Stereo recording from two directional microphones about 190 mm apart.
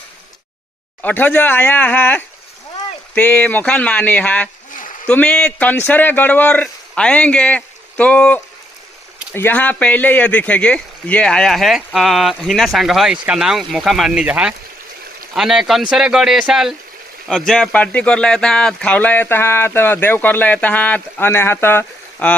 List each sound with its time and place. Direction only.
1.0 s speech: 10° left (ahead or behind)